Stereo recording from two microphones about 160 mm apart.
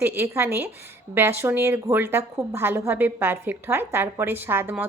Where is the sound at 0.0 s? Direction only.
15° right (ahead or behind).